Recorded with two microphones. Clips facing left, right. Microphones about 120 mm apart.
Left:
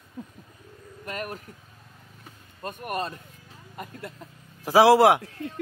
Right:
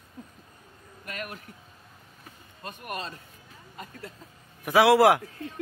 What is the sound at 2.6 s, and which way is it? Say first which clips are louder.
Speech: left 6 dB; 50° left (ahead or behind).